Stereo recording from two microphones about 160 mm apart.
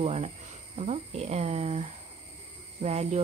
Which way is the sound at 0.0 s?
40° right (ahead or behind).